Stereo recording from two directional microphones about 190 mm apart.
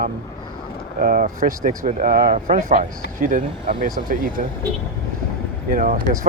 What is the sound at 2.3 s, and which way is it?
Speech, 40° right (ahead or behind).